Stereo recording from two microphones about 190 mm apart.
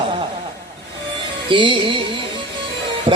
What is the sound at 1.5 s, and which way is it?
Speech, 25° right (ahead or behind).